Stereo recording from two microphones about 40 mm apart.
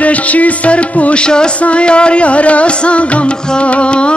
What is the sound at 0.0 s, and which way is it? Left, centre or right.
Music, left.